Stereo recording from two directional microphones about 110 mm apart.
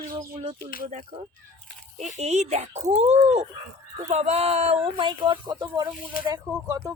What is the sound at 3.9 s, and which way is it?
Speech, 90° right.